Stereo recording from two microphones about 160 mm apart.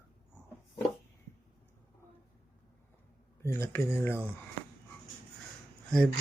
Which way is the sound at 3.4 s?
15° left (ahead or behind).